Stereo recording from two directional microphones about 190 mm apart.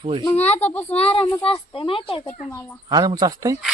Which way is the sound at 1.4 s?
25° left (ahead or behind).